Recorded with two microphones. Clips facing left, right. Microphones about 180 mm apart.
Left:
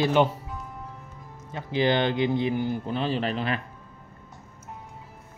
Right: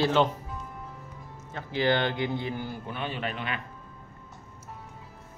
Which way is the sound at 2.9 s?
35° left (ahead or behind).